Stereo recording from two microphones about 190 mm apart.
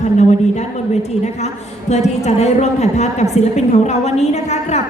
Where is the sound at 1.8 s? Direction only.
35° left (ahead or behind).